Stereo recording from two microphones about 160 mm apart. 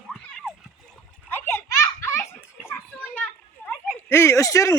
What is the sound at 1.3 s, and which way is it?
Children playing, 15° left (ahead or behind).